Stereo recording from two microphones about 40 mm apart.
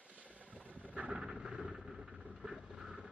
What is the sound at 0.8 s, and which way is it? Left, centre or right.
Vehicle, right.